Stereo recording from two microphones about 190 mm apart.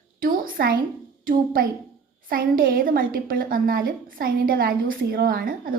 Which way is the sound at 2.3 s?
50° right (ahead or behind).